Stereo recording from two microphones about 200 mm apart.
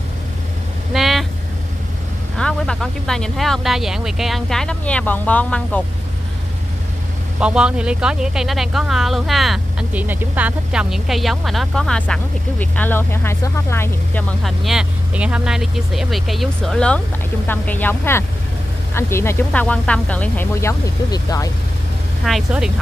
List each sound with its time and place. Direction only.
0.9 s vehicle: centre (ahead or behind)
2.3 s speech: 5° left (ahead or behind)
7.3 s speech: 5° right (ahead or behind); by 14.2 s 10° left (ahead or behind)
14.4 s speech: centre (ahead or behind); by 21.5 s 15° left (ahead or behind)
22.2 s speech: centre (ahead or behind)